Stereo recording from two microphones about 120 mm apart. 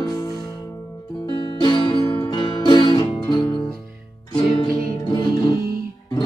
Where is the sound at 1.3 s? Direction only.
40° left (ahead or behind).